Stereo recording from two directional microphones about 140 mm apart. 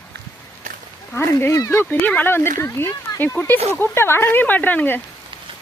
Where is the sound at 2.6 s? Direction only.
20° left (ahead or behind).